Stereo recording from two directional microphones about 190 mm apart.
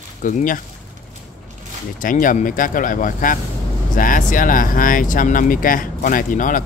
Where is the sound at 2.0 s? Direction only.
45° left (ahead or behind).